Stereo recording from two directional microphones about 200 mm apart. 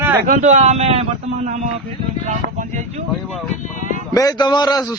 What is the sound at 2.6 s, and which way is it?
Speech, 35° right (ahead or behind).